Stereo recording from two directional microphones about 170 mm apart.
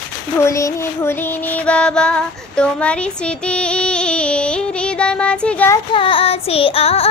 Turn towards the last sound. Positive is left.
turn(degrees=35)  # may be behind; listen again after turning